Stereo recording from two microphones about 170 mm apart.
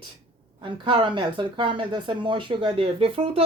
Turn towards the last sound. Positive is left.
turn(degrees=-35)  # may be behind; listen again after turning